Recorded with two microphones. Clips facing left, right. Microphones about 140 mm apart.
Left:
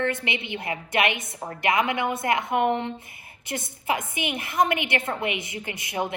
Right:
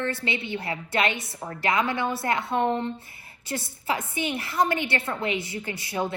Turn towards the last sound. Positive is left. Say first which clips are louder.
# even
turn(degrees=20)  # may be behind; listen again after turning